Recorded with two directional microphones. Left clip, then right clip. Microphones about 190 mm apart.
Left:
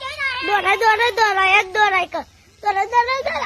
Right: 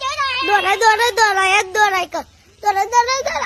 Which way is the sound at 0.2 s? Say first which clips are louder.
Right 2 dB; 65° right (ahead or behind).